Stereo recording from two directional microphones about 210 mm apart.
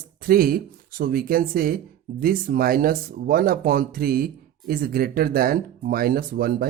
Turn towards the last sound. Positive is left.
turn(degrees=-45)  # may be behind; listen again after turning